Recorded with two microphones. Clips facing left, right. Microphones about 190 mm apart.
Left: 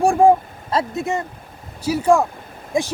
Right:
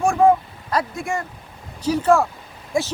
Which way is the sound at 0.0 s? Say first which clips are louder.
Left 2 dB; 30° left (ahead or behind).